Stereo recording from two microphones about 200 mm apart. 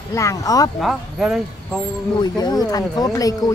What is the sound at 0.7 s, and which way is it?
Speech, centre (ahead or behind).